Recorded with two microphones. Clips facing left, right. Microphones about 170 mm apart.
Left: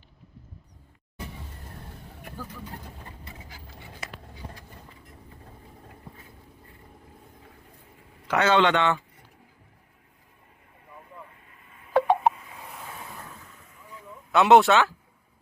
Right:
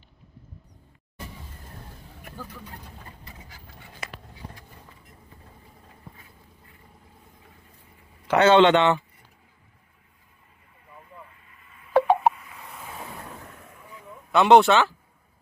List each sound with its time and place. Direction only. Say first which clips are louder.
8.3 s speech: right 5 dB; 25° right (ahead or behind)
11.9 s a sound: right 2 dB; 5° right (ahead or behind)
14.3 s speech: right 1 dB; centre (ahead or behind)